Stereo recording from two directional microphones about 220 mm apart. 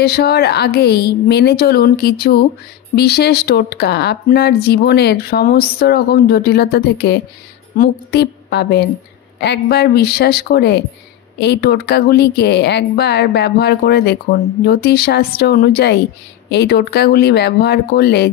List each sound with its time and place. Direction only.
0.0 s a woman's voice: 45° left (ahead or behind)